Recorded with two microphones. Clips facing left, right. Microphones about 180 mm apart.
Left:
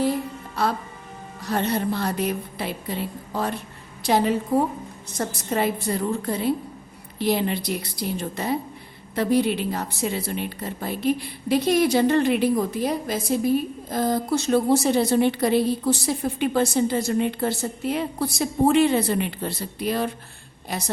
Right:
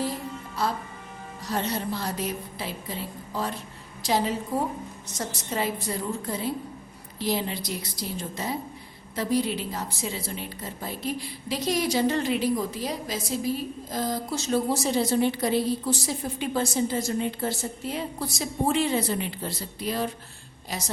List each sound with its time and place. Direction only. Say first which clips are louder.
0.6 s a woman's voice: left 4 dB; 65° left (ahead or behind)